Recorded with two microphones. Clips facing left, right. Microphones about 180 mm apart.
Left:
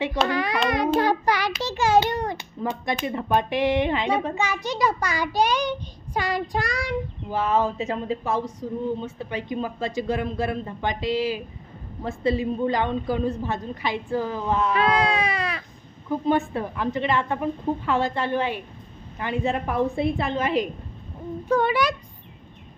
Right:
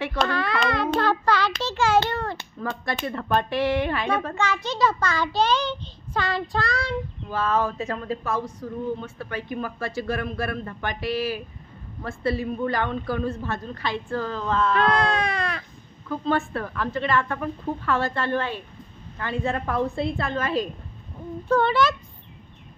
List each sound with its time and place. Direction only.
0.3 s hands: 15° left (ahead or behind)
1.0 s child singing: 15° left (ahead or behind)
4.6 s a child's voice: 15° left (ahead or behind)
16.1 s a child's voice: 20° left (ahead or behind)